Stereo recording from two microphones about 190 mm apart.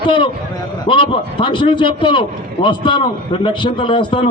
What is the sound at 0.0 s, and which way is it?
A man's voice, 25° left (ahead or behind).